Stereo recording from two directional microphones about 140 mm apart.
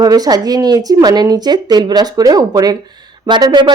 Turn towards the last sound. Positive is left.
turn(degrees=-30)  # may be behind; listen again after turning